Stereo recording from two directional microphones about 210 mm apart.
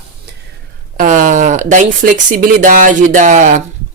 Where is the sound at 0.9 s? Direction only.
40° right (ahead or behind).